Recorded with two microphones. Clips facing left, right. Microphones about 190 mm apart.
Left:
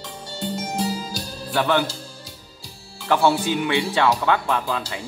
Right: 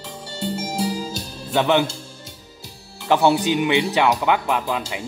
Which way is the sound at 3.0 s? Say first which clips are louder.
Right 2 dB; 20° right (ahead or behind).